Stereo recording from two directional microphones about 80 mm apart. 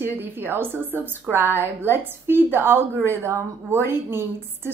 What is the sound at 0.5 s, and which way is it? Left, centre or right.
A woman's voice, right.